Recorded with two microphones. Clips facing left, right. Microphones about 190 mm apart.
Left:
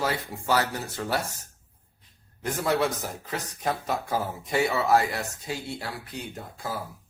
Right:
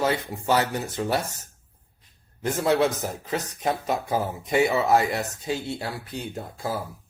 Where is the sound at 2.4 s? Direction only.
25° right (ahead or behind).